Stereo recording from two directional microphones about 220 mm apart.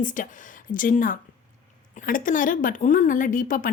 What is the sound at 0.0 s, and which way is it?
A woman's voice, 35° left (ahead or behind).